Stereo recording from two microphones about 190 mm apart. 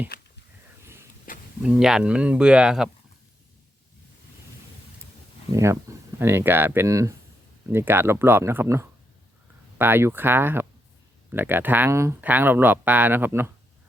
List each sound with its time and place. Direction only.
1.3 s a sound: 45° left (ahead or behind)
1.6 s speech: 5° right (ahead or behind)
5.5 s speech: 15° right (ahead or behind)